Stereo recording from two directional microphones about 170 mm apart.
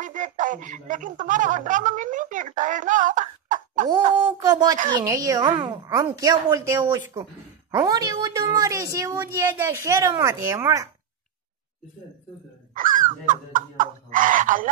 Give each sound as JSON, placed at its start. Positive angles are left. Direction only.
{"t": 0.0, "sound": "speech", "side_deg": -50}
{"t": 4.4, "sound": "a woman's voice", "side_deg": -20}
{"t": 12.7, "sound": "a sound", "side_deg": -50}